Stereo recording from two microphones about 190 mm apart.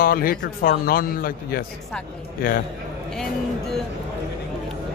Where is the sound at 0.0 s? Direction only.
50° left (ahead or behind).